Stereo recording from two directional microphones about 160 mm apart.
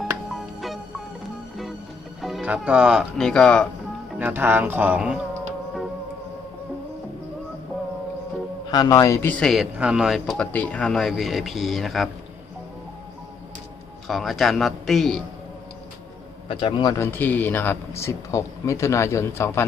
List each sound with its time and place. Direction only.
0.3 s music: centre (ahead or behind)
2.2 s speech: 5° right (ahead or behind)
4.2 s speech: 10° right (ahead or behind)
8.7 s a man's voice: 25° left (ahead or behind)
9.4 s speech: centre (ahead or behind)
14.1 s speech: centre (ahead or behind)
16.5 s a man's voice: 30° left (ahead or behind)
17.0 s a man's voice: 10° left (ahead or behind)